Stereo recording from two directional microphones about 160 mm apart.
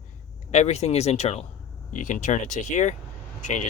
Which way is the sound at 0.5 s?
45° left (ahead or behind).